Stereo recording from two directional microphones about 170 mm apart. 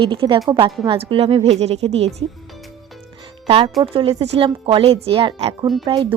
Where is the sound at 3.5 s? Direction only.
35° right (ahead or behind).